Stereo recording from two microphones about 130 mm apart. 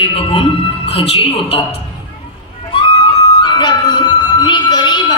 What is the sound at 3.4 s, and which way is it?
Music, 35° left (ahead or behind).